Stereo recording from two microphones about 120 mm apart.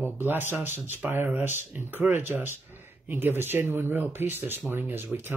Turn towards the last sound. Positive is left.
turn(degrees=-20)  # may be behind; listen again after turning